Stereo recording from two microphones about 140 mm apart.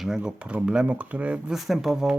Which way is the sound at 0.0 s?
5° right (ahead or behind).